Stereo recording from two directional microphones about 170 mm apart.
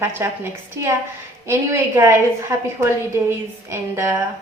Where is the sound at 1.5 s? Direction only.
15° right (ahead or behind).